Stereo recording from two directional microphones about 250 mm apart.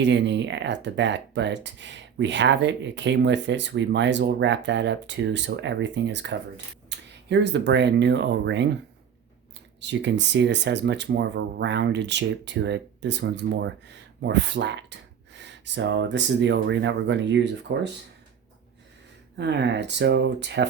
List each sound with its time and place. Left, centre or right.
0.0 s speech: right
6.9 s a sound: right
7.3 s speech: right
9.8 s speech: right
19.4 s speech: right